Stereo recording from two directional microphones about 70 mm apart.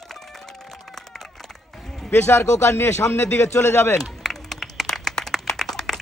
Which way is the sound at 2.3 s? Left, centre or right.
Left.